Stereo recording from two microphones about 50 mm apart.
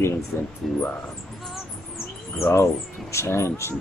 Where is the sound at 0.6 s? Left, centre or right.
Centre.